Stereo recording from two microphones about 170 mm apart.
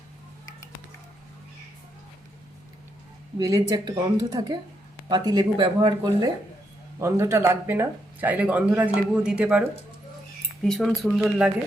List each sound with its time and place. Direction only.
3.3 s speech: 20° right (ahead or behind); by 11.5 s 5° right (ahead or behind)